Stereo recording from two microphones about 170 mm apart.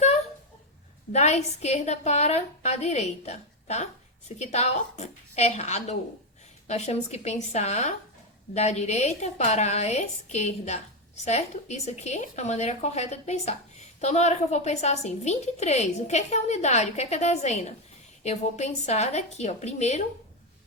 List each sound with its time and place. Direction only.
1.1 s a woman's voice: 40° left (ahead or behind)